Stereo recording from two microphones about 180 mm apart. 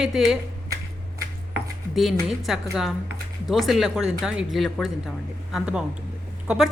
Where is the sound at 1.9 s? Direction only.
Centre (ahead or behind).